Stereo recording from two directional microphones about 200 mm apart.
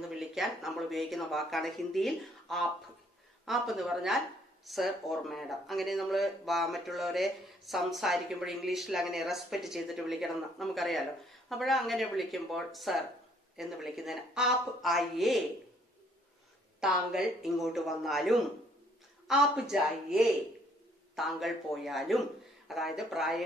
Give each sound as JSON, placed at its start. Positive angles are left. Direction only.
{"t": 0.1, "sound": "speech", "side_deg": 0}
{"t": 16.8, "sound": "speech", "side_deg": 0}